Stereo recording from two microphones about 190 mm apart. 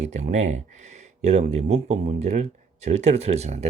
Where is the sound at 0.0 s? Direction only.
35° right (ahead or behind).